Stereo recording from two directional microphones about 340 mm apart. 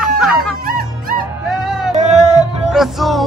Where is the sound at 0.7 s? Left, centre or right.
Right.